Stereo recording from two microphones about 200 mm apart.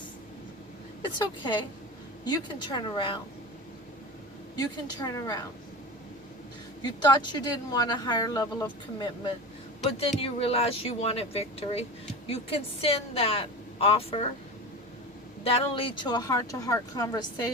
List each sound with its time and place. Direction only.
1.0 s speech: 20° left (ahead or behind)
4.5 s speech: 20° left (ahead or behind)
6.8 s speech: 20° left (ahead or behind)
15.4 s speech: 25° left (ahead or behind)